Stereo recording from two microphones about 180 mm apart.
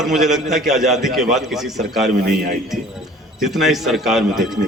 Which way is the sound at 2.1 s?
60° right (ahead or behind).